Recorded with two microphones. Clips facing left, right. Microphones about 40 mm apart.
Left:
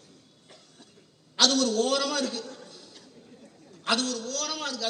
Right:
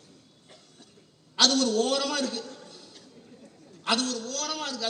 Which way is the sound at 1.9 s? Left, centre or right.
Left.